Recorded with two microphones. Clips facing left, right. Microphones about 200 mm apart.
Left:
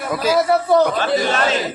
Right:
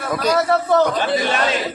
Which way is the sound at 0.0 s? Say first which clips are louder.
Left 1 dB; 5° left (ahead or behind).